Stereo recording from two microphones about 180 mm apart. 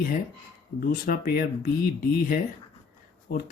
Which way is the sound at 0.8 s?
55° left (ahead or behind).